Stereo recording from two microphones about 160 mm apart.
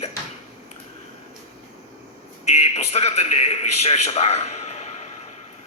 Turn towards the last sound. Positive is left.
turn(degrees=45)  # may be behind; listen again after turning